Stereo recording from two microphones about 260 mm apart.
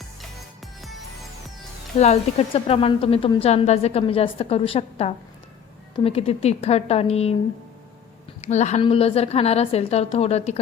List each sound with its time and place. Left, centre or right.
0.0 s music: centre
2.0 s a woman's voice: left
8.4 s a woman's voice: left